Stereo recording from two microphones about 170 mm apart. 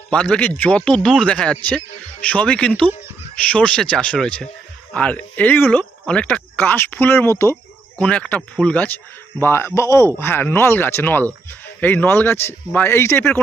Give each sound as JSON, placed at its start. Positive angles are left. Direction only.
{"t": 0.1, "sound": "speech", "side_deg": 5}